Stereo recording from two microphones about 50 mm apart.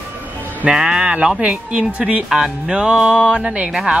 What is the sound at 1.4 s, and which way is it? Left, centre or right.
Speech, right.